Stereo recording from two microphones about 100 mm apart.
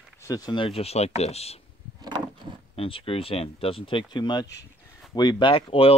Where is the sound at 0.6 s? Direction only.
70° left (ahead or behind); by 1.6 s 90° left.